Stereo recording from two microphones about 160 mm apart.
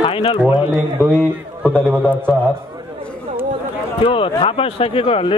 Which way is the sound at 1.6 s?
5° left (ahead or behind).